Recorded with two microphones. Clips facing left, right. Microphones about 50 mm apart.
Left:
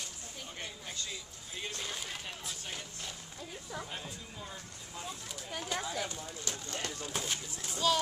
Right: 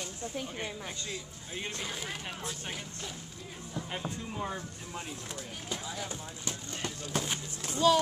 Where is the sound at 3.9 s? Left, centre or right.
Right.